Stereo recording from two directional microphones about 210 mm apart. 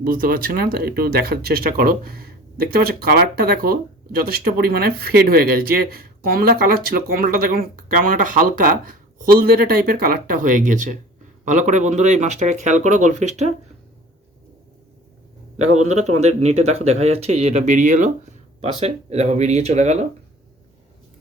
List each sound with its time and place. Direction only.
0.0 s speech: 45° right (ahead or behind)
15.5 s a man's voice: 90° right
15.9 s speech: 30° right (ahead or behind)